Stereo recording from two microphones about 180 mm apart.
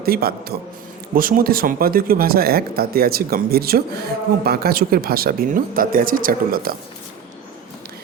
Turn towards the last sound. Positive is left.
turn(degrees=-55)  # may be behind; listen again after turning